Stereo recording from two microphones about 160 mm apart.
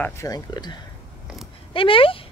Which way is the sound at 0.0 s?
20° left (ahead or behind).